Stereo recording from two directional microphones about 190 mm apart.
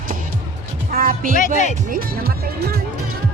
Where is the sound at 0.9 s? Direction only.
50° right (ahead or behind).